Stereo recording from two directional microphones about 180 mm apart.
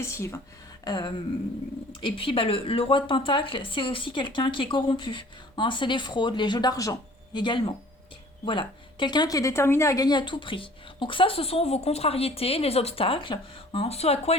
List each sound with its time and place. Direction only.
0.0 s a woman's voice: 15° left (ahead or behind); by 14.3 s 35° left (ahead or behind)